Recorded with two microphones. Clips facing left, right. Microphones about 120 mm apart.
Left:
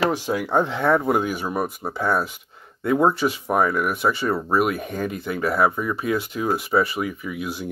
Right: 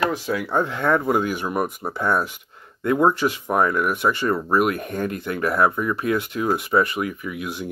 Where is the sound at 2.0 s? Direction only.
5° left (ahead or behind).